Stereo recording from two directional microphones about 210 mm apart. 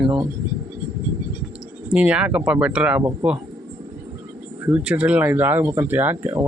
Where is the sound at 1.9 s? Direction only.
5° right (ahead or behind).